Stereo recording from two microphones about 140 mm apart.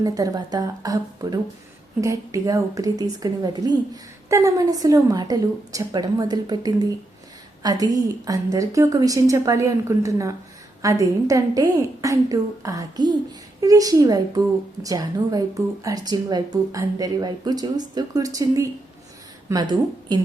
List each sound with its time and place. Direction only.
0.0 s a woman's voice: 25° right (ahead or behind)